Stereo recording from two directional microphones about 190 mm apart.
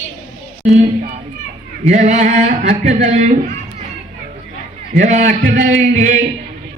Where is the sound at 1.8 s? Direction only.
35° right (ahead or behind).